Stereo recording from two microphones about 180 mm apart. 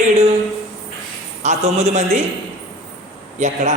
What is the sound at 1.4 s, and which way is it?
Speech, 40° right (ahead or behind).